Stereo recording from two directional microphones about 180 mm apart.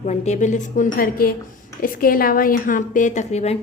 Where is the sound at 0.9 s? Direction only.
55° left (ahead or behind); by 3.6 s 40° left (ahead or behind).